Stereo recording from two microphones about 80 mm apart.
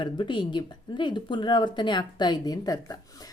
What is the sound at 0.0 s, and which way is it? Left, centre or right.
Speech, left.